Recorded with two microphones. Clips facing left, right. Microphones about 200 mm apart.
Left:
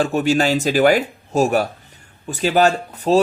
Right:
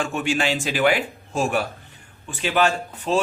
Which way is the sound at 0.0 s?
35° left (ahead or behind).